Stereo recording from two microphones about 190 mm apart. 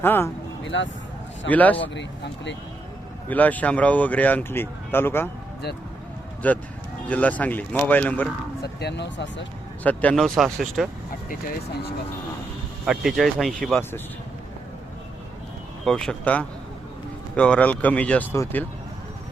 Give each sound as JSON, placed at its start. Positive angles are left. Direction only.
{"t": 0.0, "sound": "speech", "side_deg": 10}
{"t": 0.6, "sound": "speech", "side_deg": 75}
{"t": 1.5, "sound": "speech", "side_deg": 10}
{"t": 2.0, "sound": "speech", "side_deg": 70}
{"t": 3.2, "sound": "speech", "side_deg": 10}
{"t": 6.4, "sound": "speech", "side_deg": 10}
{"t": 8.6, "sound": "speech", "side_deg": 60}
{"t": 9.8, "sound": "speech", "side_deg": 5}
{"t": 12.8, "sound": "speech", "side_deg": 0}
{"t": 15.8, "sound": "speech", "side_deg": 5}